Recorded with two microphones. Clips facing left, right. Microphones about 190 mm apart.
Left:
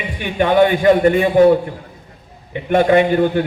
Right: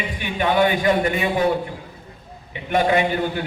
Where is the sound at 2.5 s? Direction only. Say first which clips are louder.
Left 6 dB; 40° left (ahead or behind).